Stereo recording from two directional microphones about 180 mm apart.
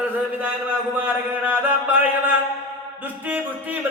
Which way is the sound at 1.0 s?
10° right (ahead or behind).